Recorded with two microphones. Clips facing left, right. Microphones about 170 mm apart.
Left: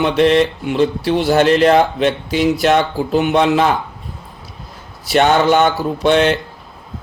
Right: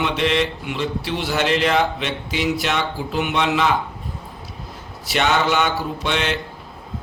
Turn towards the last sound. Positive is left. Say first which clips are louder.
# left 10 dB
turn(degrees=45)  # may be behind; listen again after turning